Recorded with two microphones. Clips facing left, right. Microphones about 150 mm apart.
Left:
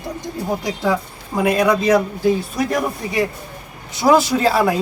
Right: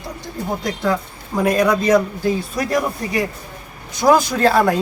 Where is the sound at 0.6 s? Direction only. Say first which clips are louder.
Right 1 dB; 10° left (ahead or behind).